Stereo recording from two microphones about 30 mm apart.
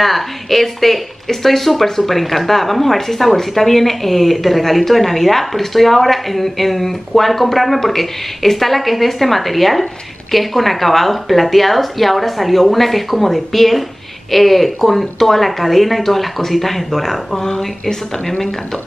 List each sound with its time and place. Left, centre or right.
0.0 s speech: centre
17.4 s speech: centre